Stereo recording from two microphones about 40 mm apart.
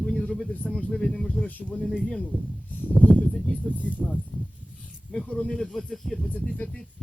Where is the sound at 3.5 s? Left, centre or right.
Right.